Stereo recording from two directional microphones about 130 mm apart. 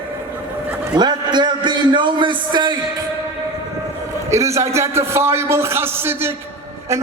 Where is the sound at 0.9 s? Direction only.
35° right (ahead or behind).